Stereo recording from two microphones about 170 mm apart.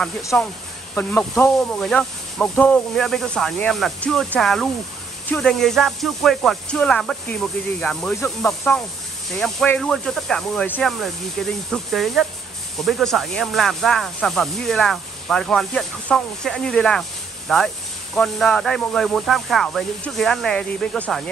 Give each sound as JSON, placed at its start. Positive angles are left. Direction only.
{"t": 0.3, "sound": "speech", "side_deg": 10}